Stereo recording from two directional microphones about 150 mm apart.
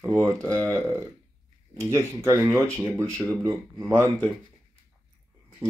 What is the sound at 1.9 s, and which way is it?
Speech, 20° right (ahead or behind).